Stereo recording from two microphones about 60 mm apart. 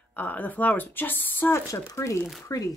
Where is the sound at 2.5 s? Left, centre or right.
Left.